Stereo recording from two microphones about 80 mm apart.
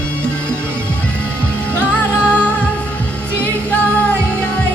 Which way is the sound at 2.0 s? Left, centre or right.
Left.